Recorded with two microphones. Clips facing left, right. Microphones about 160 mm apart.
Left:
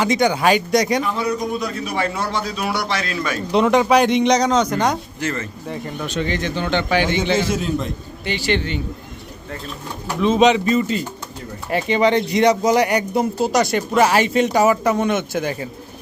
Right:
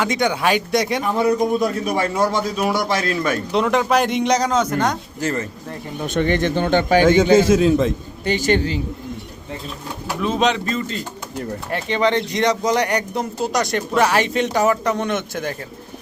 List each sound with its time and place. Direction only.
0.0 s speech: centre (ahead or behind)
1.1 s a man's voice: 50° right (ahead or behind)
3.5 s speech: centre (ahead or behind)
5.2 s speech: 40° right (ahead or behind)
5.6 s speech: centre (ahead or behind)
6.1 s a man's voice: 55° right (ahead or behind)
7.5 s a man's voice: 90° right
8.2 s a man's voice: 45° right (ahead or behind)
10.2 s speech: centre (ahead or behind)